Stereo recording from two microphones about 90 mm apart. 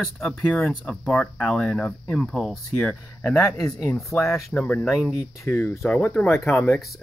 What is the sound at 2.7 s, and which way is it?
Speech, 15° left (ahead or behind).